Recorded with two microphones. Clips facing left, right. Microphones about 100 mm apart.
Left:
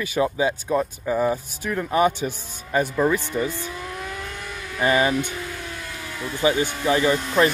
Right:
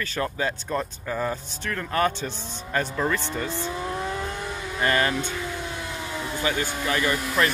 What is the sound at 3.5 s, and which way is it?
Vehicle, 20° right (ahead or behind).